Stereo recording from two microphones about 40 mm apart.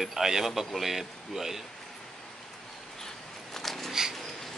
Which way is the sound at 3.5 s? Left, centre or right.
Centre.